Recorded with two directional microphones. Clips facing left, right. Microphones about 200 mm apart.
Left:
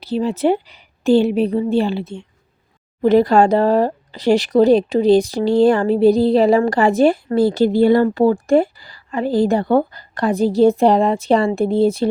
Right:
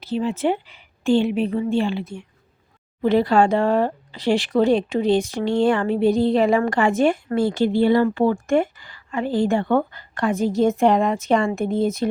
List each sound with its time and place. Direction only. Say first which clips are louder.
0.0 s speech: left 4 dB; 35° left (ahead or behind)
3.0 s speech: left 4 dB; 40° left (ahead or behind)